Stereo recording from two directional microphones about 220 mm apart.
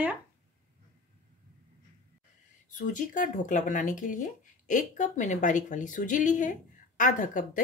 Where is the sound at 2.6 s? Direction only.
35° left (ahead or behind).